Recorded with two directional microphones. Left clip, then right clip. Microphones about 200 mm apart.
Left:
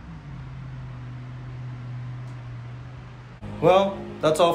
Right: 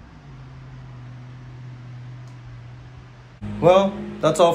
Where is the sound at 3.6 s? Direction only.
10° left (ahead or behind).